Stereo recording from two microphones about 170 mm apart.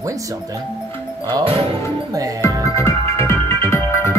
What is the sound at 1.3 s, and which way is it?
Speech, 30° right (ahead or behind).